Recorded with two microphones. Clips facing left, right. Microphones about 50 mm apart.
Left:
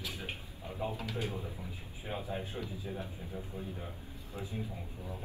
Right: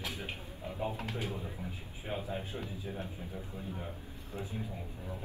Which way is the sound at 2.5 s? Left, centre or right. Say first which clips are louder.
Even; right.